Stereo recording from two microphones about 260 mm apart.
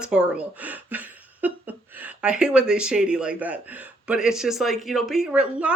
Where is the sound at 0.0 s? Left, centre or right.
Centre.